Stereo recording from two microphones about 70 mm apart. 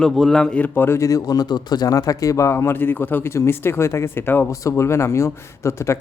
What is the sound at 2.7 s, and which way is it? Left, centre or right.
Speech, left.